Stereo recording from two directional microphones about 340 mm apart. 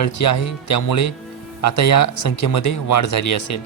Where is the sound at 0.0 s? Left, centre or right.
Left.